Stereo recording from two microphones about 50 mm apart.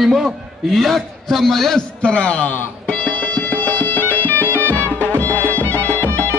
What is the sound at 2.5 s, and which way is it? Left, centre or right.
Music, left.